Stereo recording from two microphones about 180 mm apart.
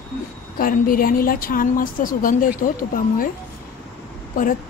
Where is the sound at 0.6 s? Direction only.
55° left (ahead or behind).